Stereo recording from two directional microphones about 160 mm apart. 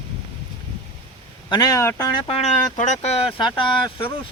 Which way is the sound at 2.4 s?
50° left (ahead or behind).